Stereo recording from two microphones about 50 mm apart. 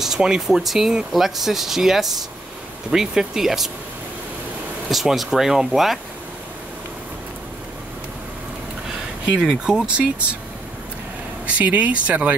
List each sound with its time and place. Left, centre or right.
0.0 s speech: centre
4.8 s speech: centre
9.4 s speech: centre
11.4 s speech: right